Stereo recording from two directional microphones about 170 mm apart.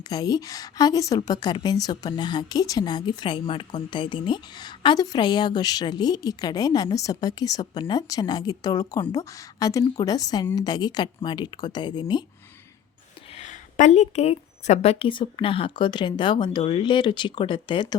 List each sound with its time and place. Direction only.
0.1 s a woman's voice: 20° left (ahead or behind)
13.3 s a woman's voice: 45° left (ahead or behind); by 17.8 s 30° left (ahead or behind)